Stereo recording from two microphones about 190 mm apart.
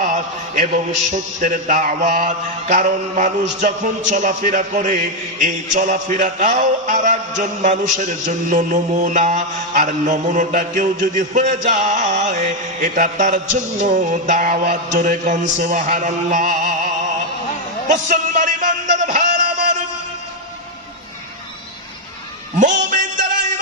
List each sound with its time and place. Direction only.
1.0 s mantra: 40° right (ahead or behind)
17.8 s music: 40° right (ahead or behind)
22.6 s music: 40° right (ahead or behind)